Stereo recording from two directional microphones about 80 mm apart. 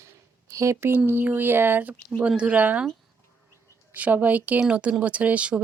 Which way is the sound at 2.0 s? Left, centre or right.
Centre.